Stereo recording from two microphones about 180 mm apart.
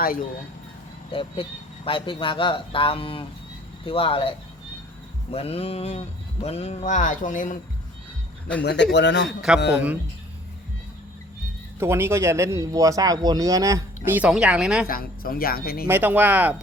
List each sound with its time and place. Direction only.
1.1 s speech: 30° left (ahead or behind); by 7.6 s 45° left (ahead or behind)
8.6 s speech: 75° left (ahead or behind)
9.7 s speech: 10° right (ahead or behind)
11.8 s speech: 15° right (ahead or behind)
14.8 s speech: 55° left (ahead or behind)
15.9 s speech: 10° right (ahead or behind)